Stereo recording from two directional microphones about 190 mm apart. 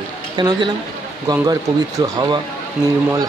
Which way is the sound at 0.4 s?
20° right (ahead or behind).